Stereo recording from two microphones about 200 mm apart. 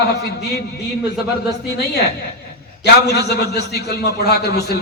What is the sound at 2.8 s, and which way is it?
A man's voice, 55° left (ahead or behind).